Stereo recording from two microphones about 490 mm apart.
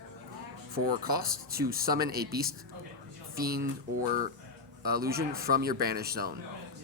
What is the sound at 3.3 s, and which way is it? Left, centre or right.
Speech, centre.